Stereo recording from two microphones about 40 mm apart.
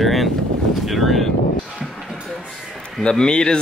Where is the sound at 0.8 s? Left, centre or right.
Centre.